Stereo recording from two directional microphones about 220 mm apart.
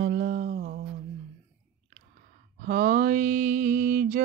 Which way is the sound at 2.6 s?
40° right (ahead or behind).